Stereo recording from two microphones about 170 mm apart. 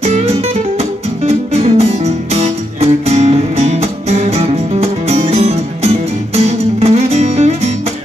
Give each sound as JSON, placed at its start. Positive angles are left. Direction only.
{"t": 0.0, "sound": "music", "side_deg": -40}